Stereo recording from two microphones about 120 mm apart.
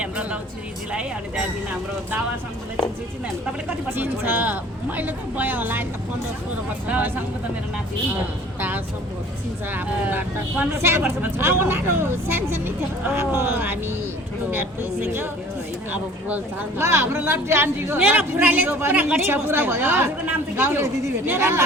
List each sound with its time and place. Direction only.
0.0 s vehicle: 10° right (ahead or behind)
3.9 s speech: 15° right (ahead or behind)
6.8 s speech: 10° right (ahead or behind)
9.7 s speech: 15° right (ahead or behind)